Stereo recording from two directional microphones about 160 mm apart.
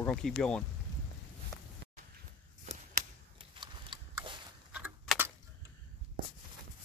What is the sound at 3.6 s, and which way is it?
Horse, 30° right (ahead or behind).